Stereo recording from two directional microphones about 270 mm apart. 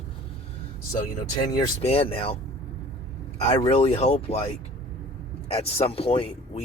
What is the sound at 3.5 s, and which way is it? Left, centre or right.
Speech, left.